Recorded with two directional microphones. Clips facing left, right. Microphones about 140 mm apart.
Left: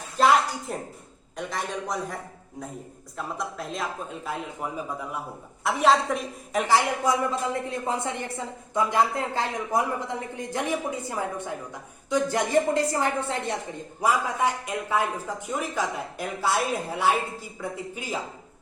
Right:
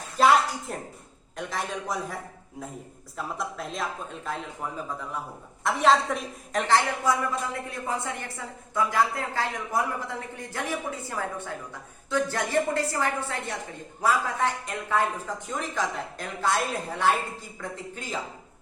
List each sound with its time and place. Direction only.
0.2 s a sound: centre (ahead or behind)
1.4 s speech: centre (ahead or behind)
3.2 s a woman's voice: centre (ahead or behind)